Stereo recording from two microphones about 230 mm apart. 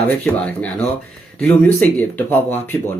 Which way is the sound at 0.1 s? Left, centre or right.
Centre.